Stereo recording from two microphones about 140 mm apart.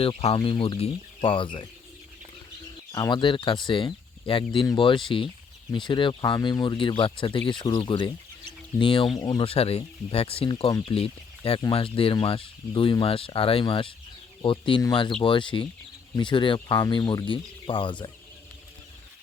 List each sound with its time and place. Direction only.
0.0 s speech: 45° left (ahead or behind)
2.9 s speech: 30° left (ahead or behind)
9.1 s speech: 25° left (ahead or behind)
9.4 s speech: 45° left (ahead or behind)